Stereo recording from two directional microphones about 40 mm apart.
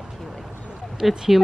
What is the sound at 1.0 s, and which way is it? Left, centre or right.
Speech, centre.